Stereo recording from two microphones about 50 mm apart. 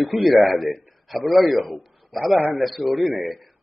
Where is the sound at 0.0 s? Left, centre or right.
Centre.